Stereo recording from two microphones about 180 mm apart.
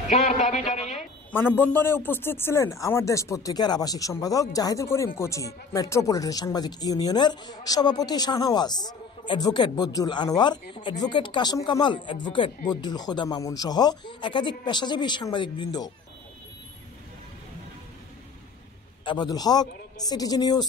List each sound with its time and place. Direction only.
0.1 s speech: 40° left (ahead or behind)
0.7 s a sound: 40° left (ahead or behind)
1.3 s speech: 10° left (ahead or behind)
19.0 s speech: 25° left (ahead or behind)